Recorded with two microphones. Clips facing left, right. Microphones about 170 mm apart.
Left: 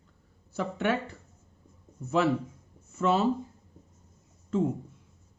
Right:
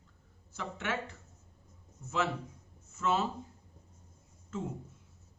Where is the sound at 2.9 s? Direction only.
30° left (ahead or behind).